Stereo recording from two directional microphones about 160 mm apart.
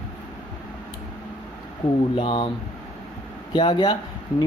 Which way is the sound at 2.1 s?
35° left (ahead or behind).